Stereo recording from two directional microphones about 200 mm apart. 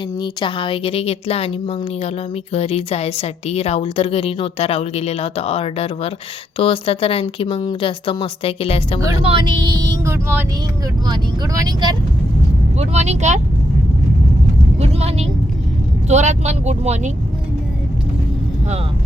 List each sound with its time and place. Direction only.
0.2 s a woman's voice: 25° left (ahead or behind)
9.2 s speech: 25° right (ahead or behind)
12.8 s speech: 35° right (ahead or behind)
14.8 s vehicle: 30° right (ahead or behind)
16.0 s speech: 35° right (ahead or behind)